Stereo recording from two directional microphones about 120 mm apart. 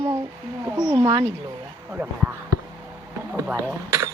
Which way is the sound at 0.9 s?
40° right (ahead or behind).